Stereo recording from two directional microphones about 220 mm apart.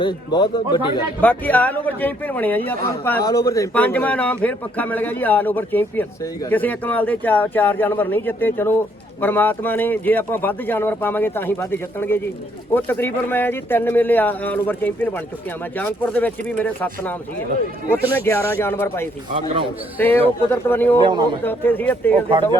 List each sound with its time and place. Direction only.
0.0 s speech: 20° left (ahead or behind)
1.2 s a man's voice: 10° left (ahead or behind)